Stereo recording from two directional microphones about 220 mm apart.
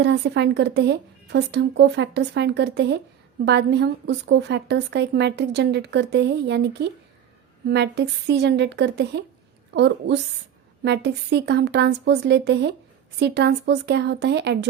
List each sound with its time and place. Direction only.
0.0 s a woman's voice: 50° right (ahead or behind)